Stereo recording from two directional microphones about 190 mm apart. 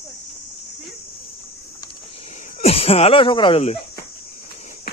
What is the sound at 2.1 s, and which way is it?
Speech, 35° left (ahead or behind).